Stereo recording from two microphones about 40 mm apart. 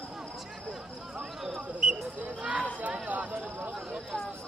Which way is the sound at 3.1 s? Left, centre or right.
Right.